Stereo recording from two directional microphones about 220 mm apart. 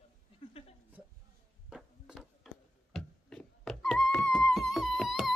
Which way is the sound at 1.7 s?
Centre (ahead or behind).